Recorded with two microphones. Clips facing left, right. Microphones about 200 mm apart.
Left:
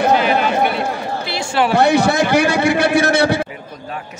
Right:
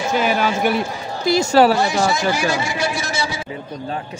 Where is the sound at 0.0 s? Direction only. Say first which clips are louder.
Left 4 dB; 60° left (ahead or behind).